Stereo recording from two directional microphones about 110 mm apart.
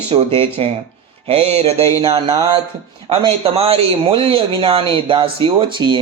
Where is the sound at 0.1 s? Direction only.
50° right (ahead or behind).